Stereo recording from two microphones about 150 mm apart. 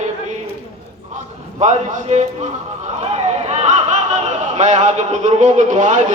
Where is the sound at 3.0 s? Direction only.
45° right (ahead or behind).